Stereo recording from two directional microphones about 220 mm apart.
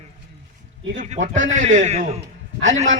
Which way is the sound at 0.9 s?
35° right (ahead or behind).